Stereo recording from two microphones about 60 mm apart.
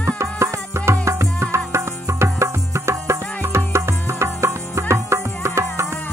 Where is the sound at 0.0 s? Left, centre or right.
Right.